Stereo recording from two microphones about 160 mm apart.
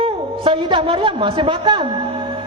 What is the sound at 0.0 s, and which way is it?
A woman's voice, 35° right (ahead or behind).